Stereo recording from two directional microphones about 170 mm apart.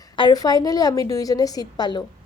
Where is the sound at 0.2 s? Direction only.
25° left (ahead or behind).